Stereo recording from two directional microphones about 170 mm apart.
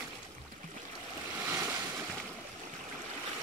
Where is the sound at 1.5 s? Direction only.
15° right (ahead or behind).